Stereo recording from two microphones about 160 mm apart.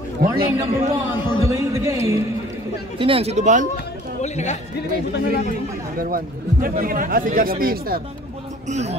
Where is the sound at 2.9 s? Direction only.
35° right (ahead or behind); by 3.7 s 50° right (ahead or behind).